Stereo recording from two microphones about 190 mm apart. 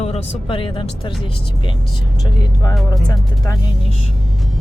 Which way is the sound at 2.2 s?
20° left (ahead or behind).